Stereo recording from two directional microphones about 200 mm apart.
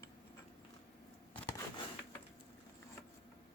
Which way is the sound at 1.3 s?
10° left (ahead or behind).